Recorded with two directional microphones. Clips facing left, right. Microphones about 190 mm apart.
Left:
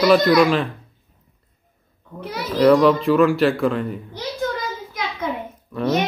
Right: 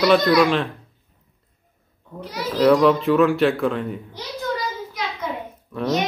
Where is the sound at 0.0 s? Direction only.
Centre (ahead or behind).